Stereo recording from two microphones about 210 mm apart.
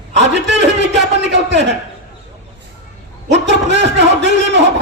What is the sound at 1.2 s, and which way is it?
Speech, 55° right (ahead or behind).